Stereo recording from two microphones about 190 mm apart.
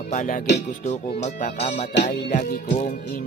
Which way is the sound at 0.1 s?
40° left (ahead or behind).